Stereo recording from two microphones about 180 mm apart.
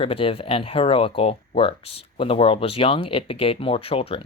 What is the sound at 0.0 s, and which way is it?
Speech, 30° left (ahead or behind).